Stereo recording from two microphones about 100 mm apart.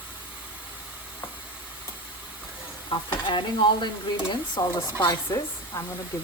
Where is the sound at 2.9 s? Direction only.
50° left (ahead or behind).